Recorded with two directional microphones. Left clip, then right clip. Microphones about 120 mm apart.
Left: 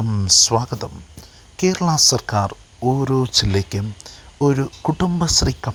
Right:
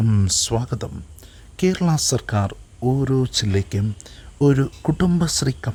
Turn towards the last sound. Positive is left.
turn(degrees=-15)  # may be behind; listen again after turning